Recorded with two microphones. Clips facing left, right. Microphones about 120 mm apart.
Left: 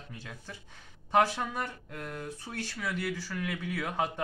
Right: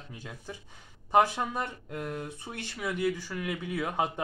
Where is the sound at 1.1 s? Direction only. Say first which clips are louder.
Right 2 dB; 15° right (ahead or behind).